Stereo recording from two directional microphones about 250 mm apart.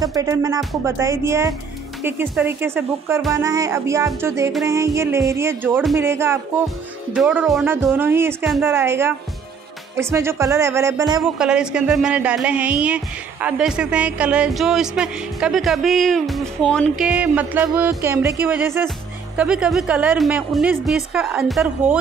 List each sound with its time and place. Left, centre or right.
0.0 s a woman's voice: centre
11.3 s speech: centre